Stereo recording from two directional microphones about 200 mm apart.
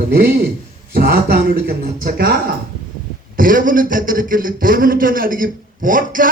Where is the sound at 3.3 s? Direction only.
45° right (ahead or behind).